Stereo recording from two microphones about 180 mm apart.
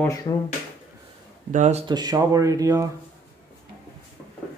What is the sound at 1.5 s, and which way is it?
Speech, 40° right (ahead or behind).